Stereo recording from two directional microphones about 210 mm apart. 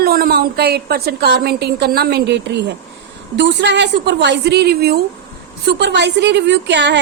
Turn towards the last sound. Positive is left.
turn(degrees=-55)  # may be behind; listen again after turning